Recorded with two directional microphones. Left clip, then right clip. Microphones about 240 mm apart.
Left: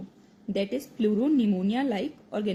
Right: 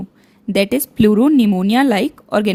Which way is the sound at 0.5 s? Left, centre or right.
Right.